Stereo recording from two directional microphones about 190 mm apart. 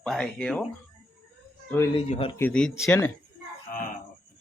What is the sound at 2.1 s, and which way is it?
Speech, 30° left (ahead or behind).